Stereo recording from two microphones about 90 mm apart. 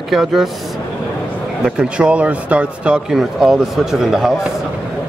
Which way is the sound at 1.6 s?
10° right (ahead or behind).